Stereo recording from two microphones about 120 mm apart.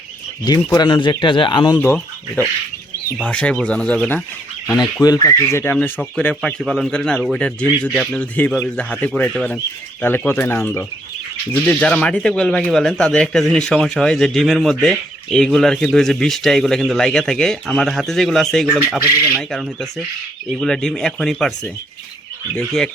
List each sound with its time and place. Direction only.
0.4 s speech: 35° left (ahead or behind)
3.2 s speech: 10° left (ahead or behind)
4.9 s speech: 30° left (ahead or behind)
6.0 s speech: 10° left (ahead or behind)
10.0 s speech: 20° left (ahead or behind)